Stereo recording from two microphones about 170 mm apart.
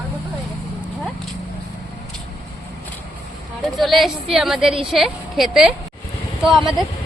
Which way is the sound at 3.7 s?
Centre (ahead or behind).